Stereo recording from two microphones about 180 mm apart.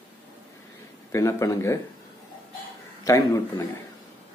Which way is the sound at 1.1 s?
15° left (ahead or behind).